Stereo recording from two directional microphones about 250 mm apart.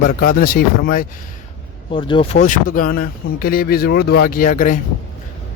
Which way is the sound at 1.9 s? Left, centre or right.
Centre.